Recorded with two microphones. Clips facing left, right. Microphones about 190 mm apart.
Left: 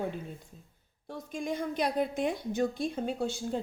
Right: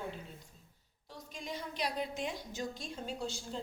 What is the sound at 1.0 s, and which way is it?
A woman's voice, 55° left (ahead or behind).